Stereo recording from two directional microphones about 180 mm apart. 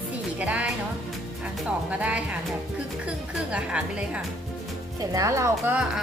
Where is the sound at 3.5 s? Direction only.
5° right (ahead or behind).